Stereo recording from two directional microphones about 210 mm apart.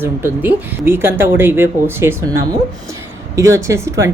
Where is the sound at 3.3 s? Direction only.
15° right (ahead or behind).